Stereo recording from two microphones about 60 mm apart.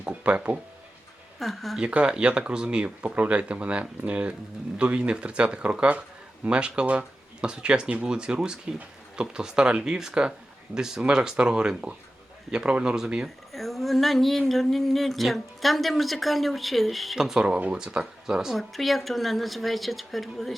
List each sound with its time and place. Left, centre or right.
0.0 s speech: right
1.4 s speech: centre
1.8 s speech: centre
13.2 s speech: centre
17.2 s speech: centre